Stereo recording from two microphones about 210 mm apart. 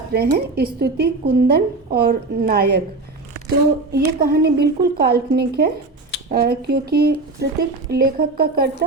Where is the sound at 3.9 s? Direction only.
45° right (ahead or behind).